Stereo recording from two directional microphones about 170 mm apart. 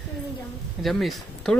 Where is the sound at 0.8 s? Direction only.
Centre (ahead or behind).